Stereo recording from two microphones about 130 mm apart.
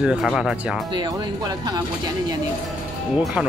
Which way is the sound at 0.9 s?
35° right (ahead or behind).